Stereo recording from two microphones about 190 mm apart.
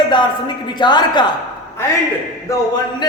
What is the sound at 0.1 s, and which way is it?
A man's voice, 25° left (ahead or behind).